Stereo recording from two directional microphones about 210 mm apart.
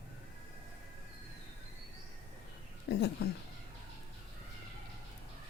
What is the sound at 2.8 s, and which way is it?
Speech, 50° left (ahead or behind).